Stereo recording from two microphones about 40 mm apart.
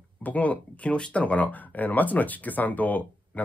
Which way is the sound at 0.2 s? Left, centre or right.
Left.